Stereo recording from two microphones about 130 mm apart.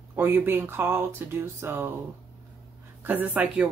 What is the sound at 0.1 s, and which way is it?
Speech, 15° right (ahead or behind).